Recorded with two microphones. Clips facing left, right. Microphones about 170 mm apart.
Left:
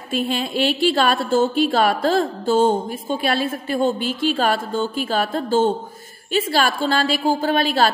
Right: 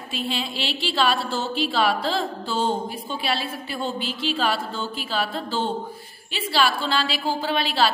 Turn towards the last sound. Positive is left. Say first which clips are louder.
# left 4 dB
turn(degrees=45)  # may be behind; listen again after turning